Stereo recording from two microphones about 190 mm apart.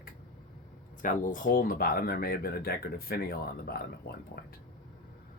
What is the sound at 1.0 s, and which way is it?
Speech, 45° left (ahead or behind).